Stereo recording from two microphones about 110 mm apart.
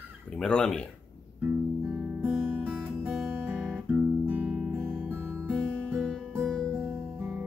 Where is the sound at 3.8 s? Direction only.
15° right (ahead or behind).